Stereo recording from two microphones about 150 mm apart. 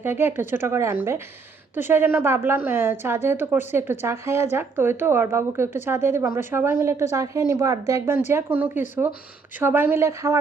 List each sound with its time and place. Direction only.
0.0 s a woman's voice: 15° right (ahead or behind)